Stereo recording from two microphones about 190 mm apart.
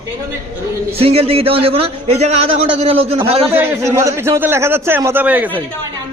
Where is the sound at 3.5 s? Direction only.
10° right (ahead or behind).